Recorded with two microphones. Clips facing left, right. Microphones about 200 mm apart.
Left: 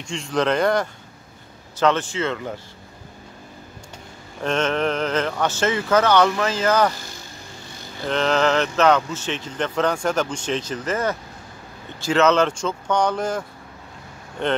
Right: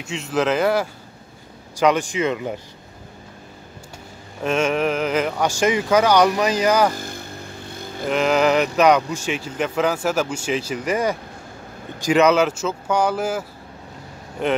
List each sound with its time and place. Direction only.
0.0 s speech: 5° right (ahead or behind)
4.4 s speech: 10° right (ahead or behind)
7.0 s vehicle: 55° right (ahead or behind)
8.1 s speech: 10° right (ahead or behind)